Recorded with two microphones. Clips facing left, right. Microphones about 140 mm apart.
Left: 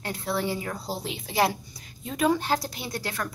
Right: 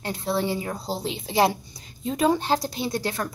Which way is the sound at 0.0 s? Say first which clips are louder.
Right 3 dB; 25° right (ahead or behind).